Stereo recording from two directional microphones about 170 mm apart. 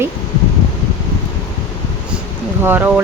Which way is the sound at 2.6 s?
10° right (ahead or behind).